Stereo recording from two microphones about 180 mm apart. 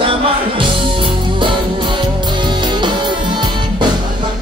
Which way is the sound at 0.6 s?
25° right (ahead or behind).